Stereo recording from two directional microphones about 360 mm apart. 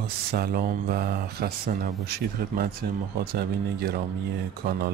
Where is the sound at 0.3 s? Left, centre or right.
Right.